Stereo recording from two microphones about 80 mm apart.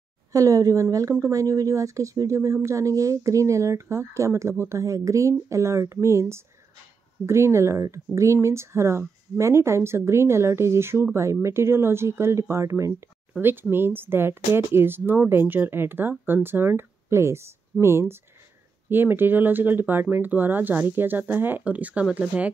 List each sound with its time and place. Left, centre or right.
0.3 s a woman's voice: right
13.4 s speech: right